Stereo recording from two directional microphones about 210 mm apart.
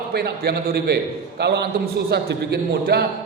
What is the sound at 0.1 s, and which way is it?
A man's voice, 50° right (ahead or behind).